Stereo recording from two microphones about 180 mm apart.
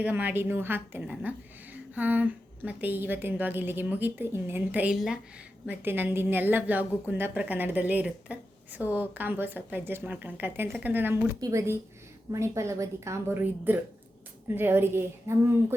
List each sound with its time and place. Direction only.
0.0 s a woman's voice: 10° right (ahead or behind)